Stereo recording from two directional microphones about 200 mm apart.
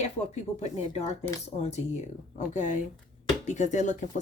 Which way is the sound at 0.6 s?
30° left (ahead or behind).